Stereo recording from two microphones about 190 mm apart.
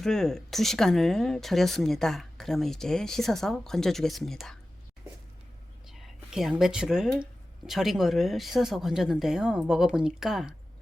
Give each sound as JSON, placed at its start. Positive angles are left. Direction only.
{"t": 0.0, "sound": "speech", "side_deg": 5}
{"t": 5.9, "sound": "speech", "side_deg": 0}